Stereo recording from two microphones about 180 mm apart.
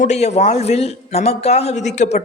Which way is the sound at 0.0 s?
40° left (ahead or behind).